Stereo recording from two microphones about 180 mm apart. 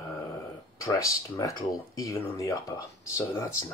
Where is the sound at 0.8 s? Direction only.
20° left (ahead or behind).